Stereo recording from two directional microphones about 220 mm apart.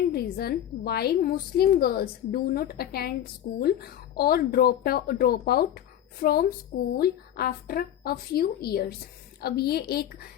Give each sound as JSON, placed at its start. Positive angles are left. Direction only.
{"t": 0.1, "sound": "a woman's voice", "side_deg": 45}